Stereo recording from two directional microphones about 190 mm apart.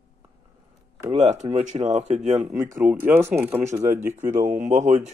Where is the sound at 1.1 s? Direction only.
35° right (ahead or behind).